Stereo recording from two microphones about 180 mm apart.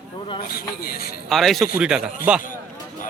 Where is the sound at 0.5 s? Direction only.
55° left (ahead or behind).